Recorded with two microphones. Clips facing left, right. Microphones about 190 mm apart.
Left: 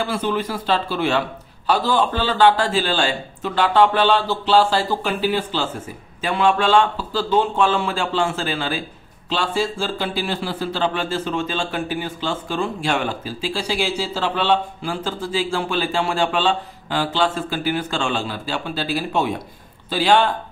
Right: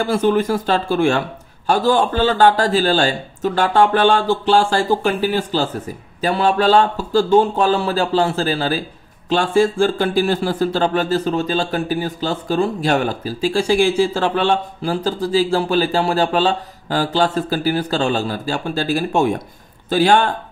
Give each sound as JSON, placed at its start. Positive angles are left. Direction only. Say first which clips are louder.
{"t": 0.0, "sound": "a man's voice", "louder": "right 6 dB", "side_deg": -45}
{"t": 9.3, "sound": "a man's voice", "louder": "right 7 dB", "side_deg": -50}